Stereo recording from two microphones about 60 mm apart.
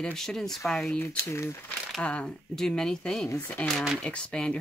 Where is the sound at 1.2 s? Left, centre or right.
Left.